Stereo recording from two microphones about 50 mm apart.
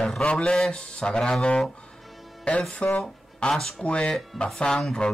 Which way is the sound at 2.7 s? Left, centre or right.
Left.